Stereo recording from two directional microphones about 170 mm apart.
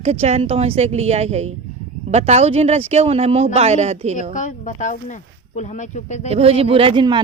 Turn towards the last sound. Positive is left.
turn(degrees=-30)  # may be behind; listen again after turning